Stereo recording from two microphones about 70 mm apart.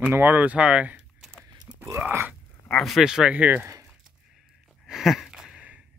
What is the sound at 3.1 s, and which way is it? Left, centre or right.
Speech, centre.